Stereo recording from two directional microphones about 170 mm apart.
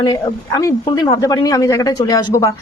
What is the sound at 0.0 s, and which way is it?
Speech, 20° left (ahead or behind).